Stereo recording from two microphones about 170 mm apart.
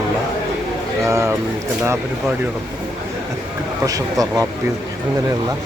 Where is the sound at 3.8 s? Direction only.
20° right (ahead or behind).